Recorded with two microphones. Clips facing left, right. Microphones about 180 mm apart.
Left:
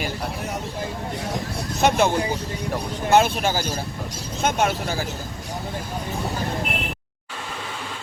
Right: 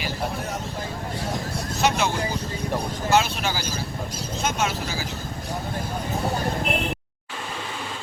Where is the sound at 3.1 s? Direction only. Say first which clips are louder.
Left 4 dB; 55° left (ahead or behind).